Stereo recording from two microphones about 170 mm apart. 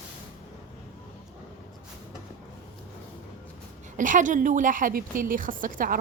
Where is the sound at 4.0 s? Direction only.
50° right (ahead or behind).